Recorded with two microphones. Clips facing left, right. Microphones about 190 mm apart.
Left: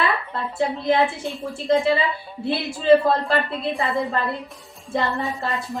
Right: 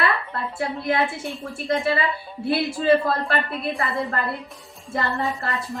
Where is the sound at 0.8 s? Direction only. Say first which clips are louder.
Left 3 dB; 20° left (ahead or behind).